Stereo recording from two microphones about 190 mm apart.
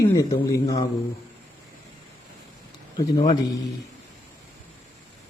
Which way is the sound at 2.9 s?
20° left (ahead or behind).